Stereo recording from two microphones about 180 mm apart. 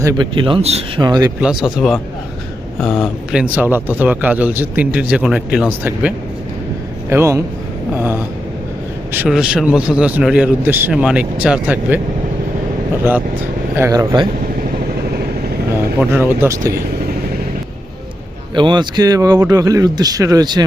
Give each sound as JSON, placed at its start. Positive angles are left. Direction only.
{"t": 0.0, "sound": "speech", "side_deg": -20}
{"t": 1.0, "sound": "speech", "side_deg": -20}
{"t": 1.4, "sound": "speech", "side_deg": -5}
{"t": 3.4, "sound": "speech", "side_deg": -10}
{"t": 13.7, "sound": "speech", "side_deg": -15}
{"t": 16.0, "sound": "speech", "side_deg": -10}
{"t": 18.5, "sound": "speech", "side_deg": -25}